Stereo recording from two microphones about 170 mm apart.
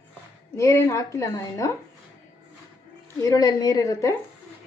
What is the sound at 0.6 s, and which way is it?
Speech, 20° left (ahead or behind).